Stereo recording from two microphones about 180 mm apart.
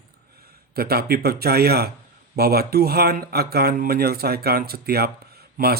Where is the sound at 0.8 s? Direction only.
60° right (ahead or behind).